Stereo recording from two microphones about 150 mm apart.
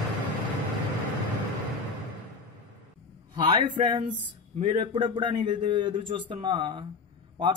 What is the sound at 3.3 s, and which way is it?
Speech, 30° right (ahead or behind).